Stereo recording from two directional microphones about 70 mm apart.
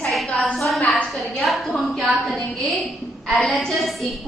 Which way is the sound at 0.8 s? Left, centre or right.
Centre.